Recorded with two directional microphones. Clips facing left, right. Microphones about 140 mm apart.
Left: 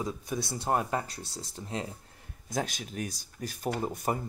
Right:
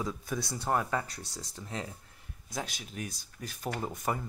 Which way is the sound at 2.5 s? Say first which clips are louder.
Left 5 dB; 50° left (ahead or behind).